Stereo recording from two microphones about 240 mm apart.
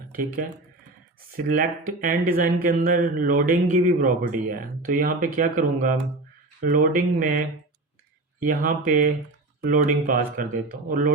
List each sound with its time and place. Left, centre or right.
0.1 s speech: right
1.9 s speech: right